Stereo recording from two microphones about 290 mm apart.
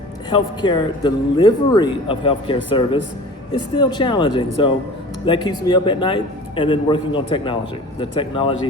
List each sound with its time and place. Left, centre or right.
0.3 s speech: centre